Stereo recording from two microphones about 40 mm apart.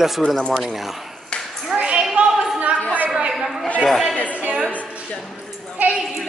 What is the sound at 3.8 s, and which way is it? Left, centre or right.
Speech, centre.